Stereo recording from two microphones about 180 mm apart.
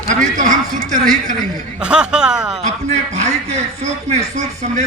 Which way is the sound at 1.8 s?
5° right (ahead or behind).